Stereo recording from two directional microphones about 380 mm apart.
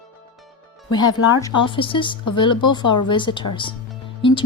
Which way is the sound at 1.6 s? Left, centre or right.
Centre.